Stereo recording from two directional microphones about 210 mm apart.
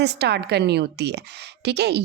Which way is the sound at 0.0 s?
50° right (ahead or behind).